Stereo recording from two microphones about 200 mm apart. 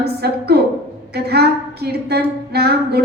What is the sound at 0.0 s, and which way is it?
A woman's voice, 55° right (ahead or behind).